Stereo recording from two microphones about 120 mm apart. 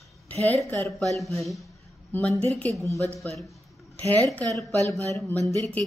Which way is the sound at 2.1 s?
10° left (ahead or behind).